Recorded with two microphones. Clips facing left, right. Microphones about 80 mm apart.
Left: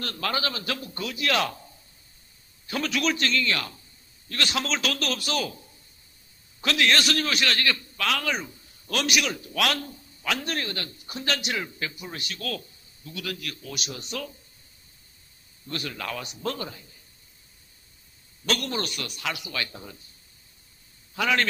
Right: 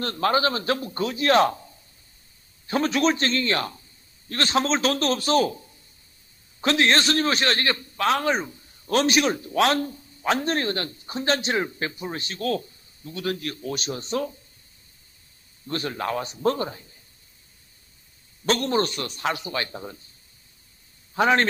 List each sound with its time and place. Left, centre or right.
0.0 s a man's voice: right
2.6 s a man's voice: right
6.6 s a man's voice: right
15.6 s a man's voice: right
18.4 s a man's voice: right
21.1 s a man's voice: right